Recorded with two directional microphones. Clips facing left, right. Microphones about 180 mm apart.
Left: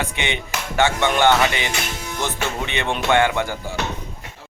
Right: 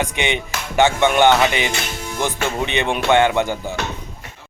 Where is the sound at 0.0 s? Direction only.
15° right (ahead or behind).